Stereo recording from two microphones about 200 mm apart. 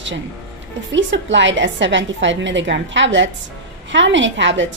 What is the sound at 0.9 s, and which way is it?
A woman's voice, 65° right (ahead or behind).